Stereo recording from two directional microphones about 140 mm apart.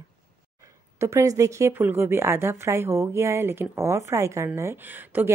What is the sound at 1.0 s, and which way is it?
A woman's voice, 20° right (ahead or behind).